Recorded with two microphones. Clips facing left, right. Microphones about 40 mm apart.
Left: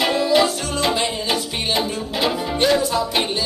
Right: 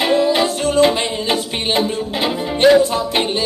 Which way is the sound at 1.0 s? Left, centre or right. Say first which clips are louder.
Right 2 dB; right.